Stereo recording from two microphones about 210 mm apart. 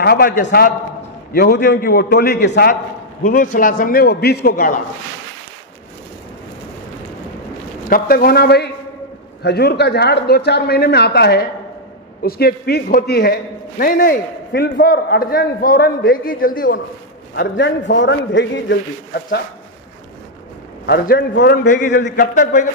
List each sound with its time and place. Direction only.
0.0 s a man's voice: 45° left (ahead or behind)
3.3 s a man's voice: 40° left (ahead or behind)
7.9 s a man's voice: 45° left (ahead or behind)
17.4 s a man's voice: 55° left (ahead or behind)
20.8 s a man's voice: 50° left (ahead or behind)
21.7 s a man's voice: 35° left (ahead or behind)